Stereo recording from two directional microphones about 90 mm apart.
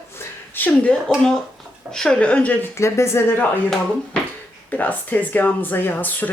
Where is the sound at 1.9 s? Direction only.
10° left (ahead or behind).